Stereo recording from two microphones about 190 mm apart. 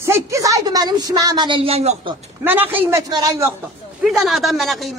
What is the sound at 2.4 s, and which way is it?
A woman's voice, 10° right (ahead or behind).